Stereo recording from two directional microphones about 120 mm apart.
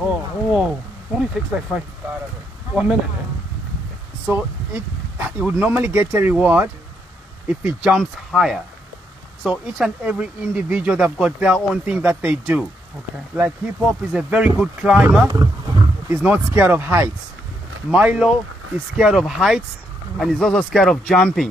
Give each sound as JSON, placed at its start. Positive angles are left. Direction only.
{"t": 0.0, "sound": "speech", "side_deg": -5}
{"t": 4.3, "sound": "speech", "side_deg": -15}
{"t": 14.1, "sound": "speech", "side_deg": -10}
{"t": 15.7, "sound": "wild animals", "side_deg": -25}
{"t": 16.5, "sound": "speech", "side_deg": -15}